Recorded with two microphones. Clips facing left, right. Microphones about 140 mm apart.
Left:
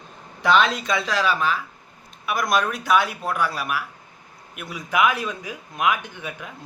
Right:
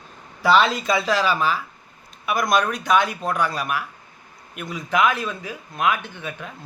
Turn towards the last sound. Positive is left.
turn(degrees=15)  # may be behind; listen again after turning